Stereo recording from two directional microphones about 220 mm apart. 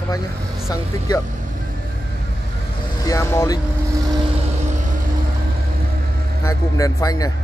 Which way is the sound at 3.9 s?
20° right (ahead or behind).